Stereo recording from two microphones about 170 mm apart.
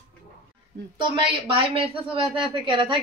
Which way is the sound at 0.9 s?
30° right (ahead or behind).